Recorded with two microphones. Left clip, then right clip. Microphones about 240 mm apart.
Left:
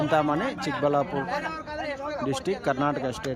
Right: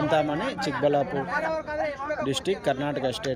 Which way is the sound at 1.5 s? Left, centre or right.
Centre.